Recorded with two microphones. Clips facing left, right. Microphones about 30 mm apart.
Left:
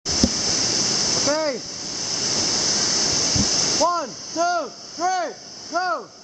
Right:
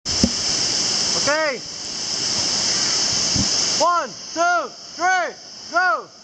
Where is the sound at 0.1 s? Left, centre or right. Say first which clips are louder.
Right 1 dB; centre.